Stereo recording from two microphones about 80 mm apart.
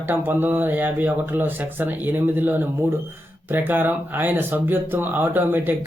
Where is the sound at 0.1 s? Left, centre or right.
Right.